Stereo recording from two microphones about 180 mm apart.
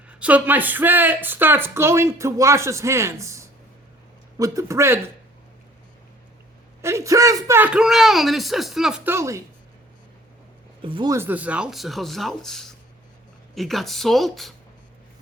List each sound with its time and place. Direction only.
0.1 s speech: 5° right (ahead or behind)
6.8 s a man's voice: 15° right (ahead or behind)
9.1 s speech: 15° right (ahead or behind)
10.8 s a man's voice: 25° right (ahead or behind); by 14.5 s centre (ahead or behind)